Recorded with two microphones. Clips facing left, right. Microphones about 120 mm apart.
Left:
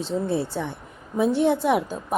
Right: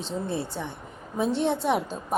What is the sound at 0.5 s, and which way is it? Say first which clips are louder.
Speech: left 5 dB; 15° right (ahead or behind).